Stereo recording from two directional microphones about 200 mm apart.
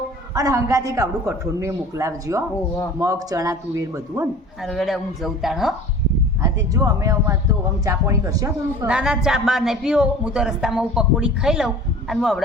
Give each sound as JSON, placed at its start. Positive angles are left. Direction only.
{"t": 0.3, "sound": "a man's voice", "side_deg": -15}
{"t": 4.6, "sound": "speech", "side_deg": 0}
{"t": 6.4, "sound": "a man's voice", "side_deg": -15}
{"t": 8.9, "sound": "speech", "side_deg": -5}